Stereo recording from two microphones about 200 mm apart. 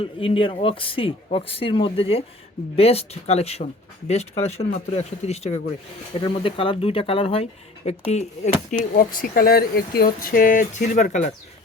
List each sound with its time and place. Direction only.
0.0 s speech: 25° left (ahead or behind)
8.8 s speech: 45° left (ahead or behind)